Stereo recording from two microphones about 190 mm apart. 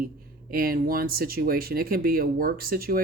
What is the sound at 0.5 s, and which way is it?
Speech, 50° right (ahead or behind).